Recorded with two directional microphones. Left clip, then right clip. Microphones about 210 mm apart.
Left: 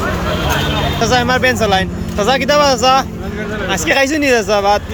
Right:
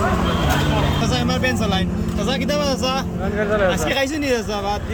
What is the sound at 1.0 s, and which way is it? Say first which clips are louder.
Speech: left 9 dB; 5° right (ahead or behind).